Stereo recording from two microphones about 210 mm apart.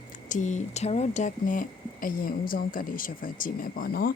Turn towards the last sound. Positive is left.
turn(degrees=45)  # may be behind; listen again after turning